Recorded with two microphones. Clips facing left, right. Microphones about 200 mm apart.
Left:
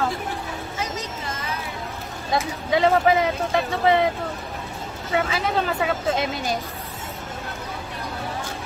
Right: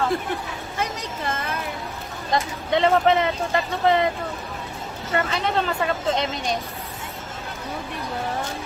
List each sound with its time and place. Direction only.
0.7 s a sound: 55° right (ahead or behind)
2.3 s speech: 5° left (ahead or behind)
5.1 s speech: 5° left (ahead or behind)